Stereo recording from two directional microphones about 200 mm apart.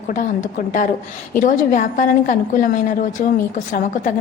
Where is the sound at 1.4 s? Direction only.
40° left (ahead or behind).